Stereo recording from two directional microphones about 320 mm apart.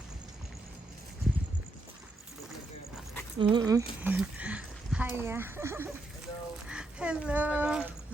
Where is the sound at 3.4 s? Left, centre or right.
Centre.